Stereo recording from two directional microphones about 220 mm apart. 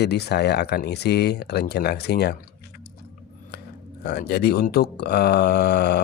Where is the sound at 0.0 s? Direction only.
50° left (ahead or behind).